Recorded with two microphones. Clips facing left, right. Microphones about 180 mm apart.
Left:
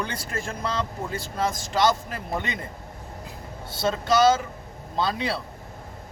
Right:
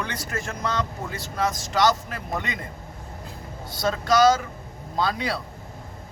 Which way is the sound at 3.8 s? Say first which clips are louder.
Right 1 dB; 25° left (ahead or behind).